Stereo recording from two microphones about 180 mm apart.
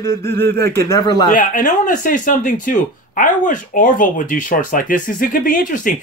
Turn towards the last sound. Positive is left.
turn(degrees=50)  # may be behind; listen again after turning